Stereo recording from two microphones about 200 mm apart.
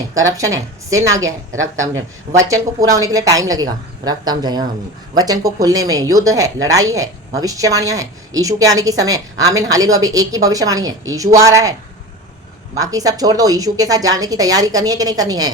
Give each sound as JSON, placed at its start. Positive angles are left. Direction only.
{"t": 0.1, "sound": "speech", "side_deg": -15}
{"t": 12.8, "sound": "speech", "side_deg": -20}